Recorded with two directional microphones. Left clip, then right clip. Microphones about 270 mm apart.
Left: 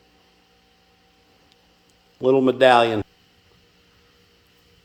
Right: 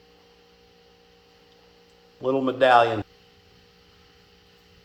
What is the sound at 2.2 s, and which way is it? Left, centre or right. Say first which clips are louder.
Speech: left 5 dB; left.